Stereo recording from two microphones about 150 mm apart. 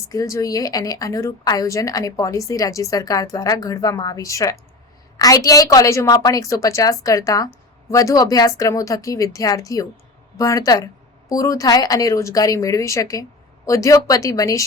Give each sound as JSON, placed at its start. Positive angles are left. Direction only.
{"t": 0.1, "sound": "a woman's voice", "side_deg": 20}